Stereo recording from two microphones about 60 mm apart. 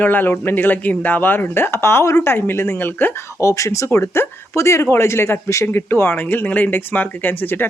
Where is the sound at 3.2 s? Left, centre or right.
Left.